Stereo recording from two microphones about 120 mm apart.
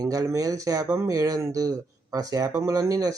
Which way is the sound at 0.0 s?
30° right (ahead or behind).